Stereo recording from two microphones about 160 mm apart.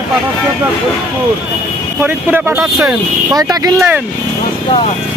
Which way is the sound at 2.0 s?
15° right (ahead or behind).